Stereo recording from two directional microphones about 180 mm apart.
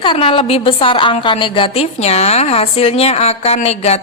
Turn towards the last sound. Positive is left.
turn(degrees=35)  # may be behind; listen again after turning